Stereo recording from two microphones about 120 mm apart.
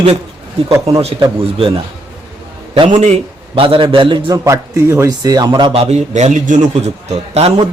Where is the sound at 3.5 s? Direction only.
45° right (ahead or behind).